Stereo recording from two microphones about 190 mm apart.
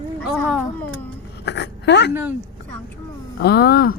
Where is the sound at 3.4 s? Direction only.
55° left (ahead or behind).